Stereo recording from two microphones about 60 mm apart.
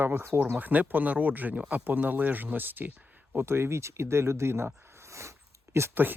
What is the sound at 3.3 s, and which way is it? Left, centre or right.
Speech, right.